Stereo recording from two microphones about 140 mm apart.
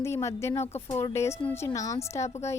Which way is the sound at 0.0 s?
20° left (ahead or behind).